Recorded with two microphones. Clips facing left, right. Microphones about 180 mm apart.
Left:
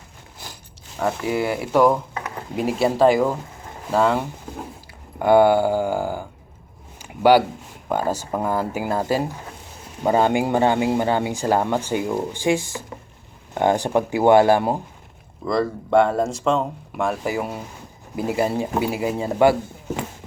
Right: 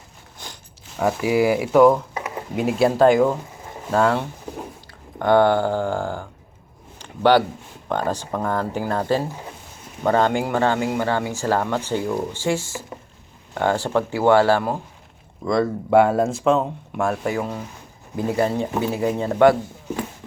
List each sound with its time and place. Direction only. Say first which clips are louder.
0.9 s speech: right 3 dB; 5° right (ahead or behind)
2.1 s a sound: right 2 dB; 15° right (ahead or behind)
2.6 s speech: right 1 dB; centre (ahead or behind)
7.0 s a sound: left 1 dB; 10° left (ahead or behind)
7.9 s speech: left 1 dB; 10° left (ahead or behind)
15.4 s speech: right 2 dB; 5° right (ahead or behind)